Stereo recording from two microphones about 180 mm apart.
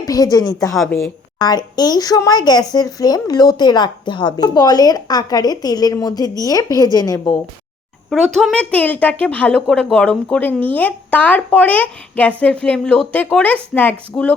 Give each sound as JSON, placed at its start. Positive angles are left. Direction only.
{"t": 0.0, "sound": "speech", "side_deg": 20}
{"t": 0.8, "sound": "a woman's voice", "side_deg": 5}
{"t": 1.4, "sound": "speech", "side_deg": 20}
{"t": 8.1, "sound": "a woman's voice", "side_deg": 0}